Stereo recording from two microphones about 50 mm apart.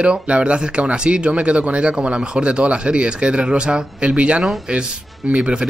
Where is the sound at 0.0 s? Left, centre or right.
Centre.